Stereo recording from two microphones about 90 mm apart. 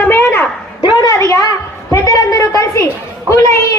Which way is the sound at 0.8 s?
50° left (ahead or behind).